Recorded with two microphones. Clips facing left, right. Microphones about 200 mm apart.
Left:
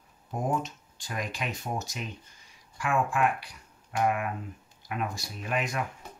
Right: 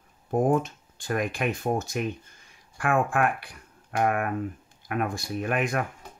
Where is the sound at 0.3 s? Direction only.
55° right (ahead or behind).